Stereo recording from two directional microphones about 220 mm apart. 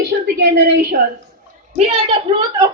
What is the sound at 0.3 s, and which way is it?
Speech, 45° right (ahead or behind).